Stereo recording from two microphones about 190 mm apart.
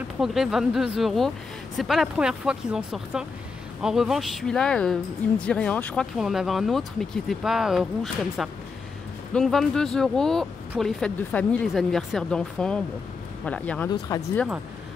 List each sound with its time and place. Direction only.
0.2 s speech: centre (ahead or behind)
14.1 s speech: 20° left (ahead or behind)